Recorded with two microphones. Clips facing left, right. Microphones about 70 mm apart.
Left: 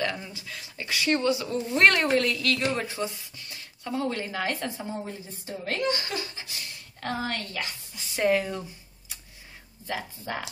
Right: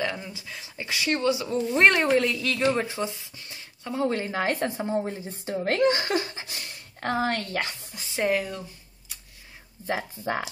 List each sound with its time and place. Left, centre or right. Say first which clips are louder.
0.0 s speech: even; centre
3.5 s a sound: left 1 dB; centre
4.0 s a woman's voice: right 5 dB; right
5.5 s speech: right 7 dB; right
5.9 s speech: right 6 dB; right
8.2 s speech: left 1 dB; centre
9.8 s a woman's voice: right 5 dB; right